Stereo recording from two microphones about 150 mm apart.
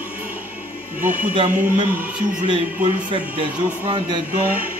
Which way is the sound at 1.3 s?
35° right (ahead or behind).